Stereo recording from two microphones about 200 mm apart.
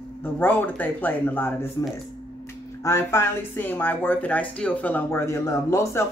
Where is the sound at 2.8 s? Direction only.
15° left (ahead or behind).